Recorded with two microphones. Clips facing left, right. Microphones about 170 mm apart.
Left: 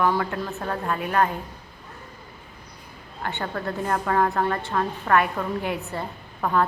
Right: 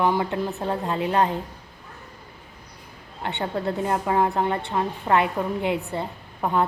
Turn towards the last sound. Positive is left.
turn(degrees=-20)  # may be behind; listen again after turning